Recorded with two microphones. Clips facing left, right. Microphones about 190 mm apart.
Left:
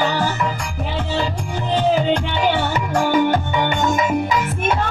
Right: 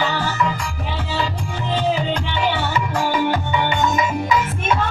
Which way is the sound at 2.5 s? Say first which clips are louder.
Left 2 dB; 55° left (ahead or behind).